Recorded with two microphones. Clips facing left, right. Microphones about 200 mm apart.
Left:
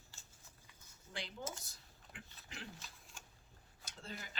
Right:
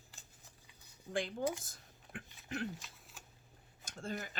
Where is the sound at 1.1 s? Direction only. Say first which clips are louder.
Right 10 dB; 50° right (ahead or behind).